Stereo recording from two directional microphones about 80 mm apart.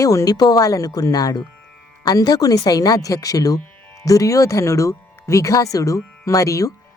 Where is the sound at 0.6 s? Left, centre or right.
Left.